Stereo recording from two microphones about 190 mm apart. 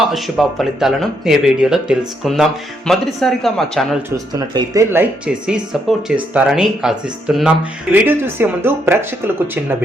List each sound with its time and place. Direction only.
0.1 s speech: centre (ahead or behind)
4.3 s speech: 20° right (ahead or behind)